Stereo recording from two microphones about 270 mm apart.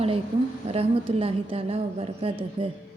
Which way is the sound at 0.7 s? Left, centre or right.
Right.